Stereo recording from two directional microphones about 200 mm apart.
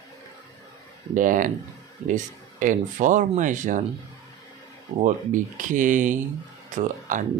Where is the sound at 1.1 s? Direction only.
40° right (ahead or behind).